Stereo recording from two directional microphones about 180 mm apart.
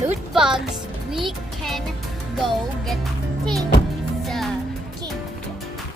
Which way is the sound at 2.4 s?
Centre (ahead or behind).